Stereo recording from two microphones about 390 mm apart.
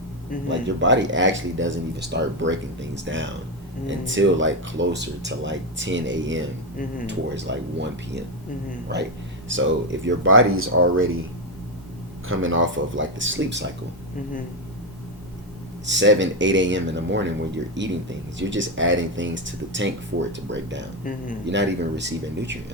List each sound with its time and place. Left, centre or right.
0.8 s speech: right
12.3 s speech: right
15.9 s speech: right